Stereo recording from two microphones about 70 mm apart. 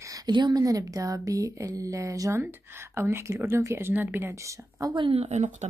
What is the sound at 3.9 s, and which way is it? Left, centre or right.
Speech, right.